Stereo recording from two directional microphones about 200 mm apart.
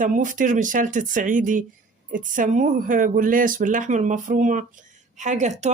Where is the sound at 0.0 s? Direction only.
40° right (ahead or behind).